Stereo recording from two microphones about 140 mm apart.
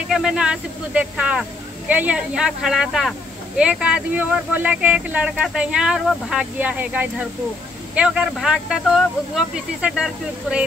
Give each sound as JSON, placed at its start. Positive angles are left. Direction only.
{"t": 0.1, "sound": "speech", "side_deg": -5}